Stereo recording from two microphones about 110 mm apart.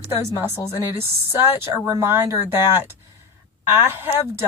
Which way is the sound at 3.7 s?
20° right (ahead or behind).